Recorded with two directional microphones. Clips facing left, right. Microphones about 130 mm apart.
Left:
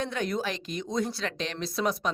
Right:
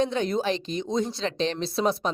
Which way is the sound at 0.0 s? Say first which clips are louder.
Right 5 dB; 25° right (ahead or behind).